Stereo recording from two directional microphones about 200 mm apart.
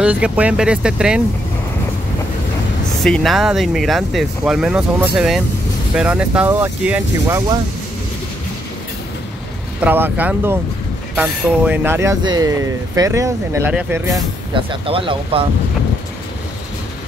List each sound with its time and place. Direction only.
0.0 s speech: 5° right (ahead or behind)
3.0 s speech: centre (ahead or behind)
9.8 s speech: 10° right (ahead or behind); by 15.4 s 25° right (ahead or behind)